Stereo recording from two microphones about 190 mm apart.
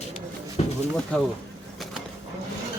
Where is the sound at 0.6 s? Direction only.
35° left (ahead or behind).